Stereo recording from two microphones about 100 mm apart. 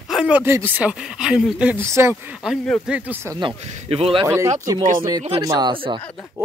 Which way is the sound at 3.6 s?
85° right.